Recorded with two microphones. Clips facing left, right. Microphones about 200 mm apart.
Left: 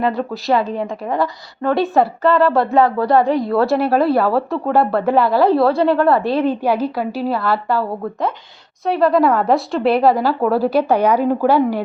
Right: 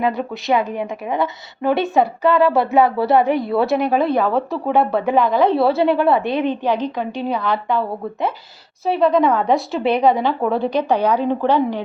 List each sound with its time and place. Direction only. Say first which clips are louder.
0.0 s speech: left 1 dB; centre (ahead or behind)
0.5 s a woman's voice: left 1 dB; 20° right (ahead or behind)
1.6 s speech: left 1 dB; centre (ahead or behind)
3.2 s a woman's voice: left 2 dB; 20° right (ahead or behind)
3.5 s speech: left 2 dB; centre (ahead or behind)